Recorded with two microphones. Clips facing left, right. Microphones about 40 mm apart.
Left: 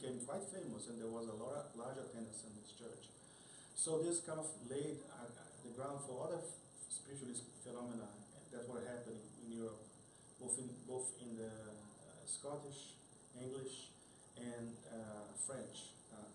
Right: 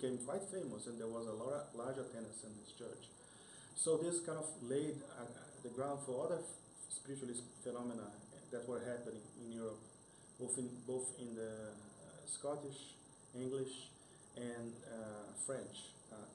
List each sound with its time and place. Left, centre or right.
0.0 s a man's voice: centre
10.4 s a man's voice: centre
12.1 s a sound: centre
13.3 s a man's voice: centre